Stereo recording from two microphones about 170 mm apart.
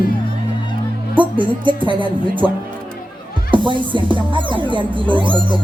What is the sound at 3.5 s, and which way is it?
Speech, 30° right (ahead or behind).